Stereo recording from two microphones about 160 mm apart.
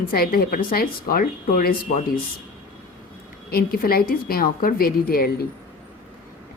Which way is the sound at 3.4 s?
70° left (ahead or behind).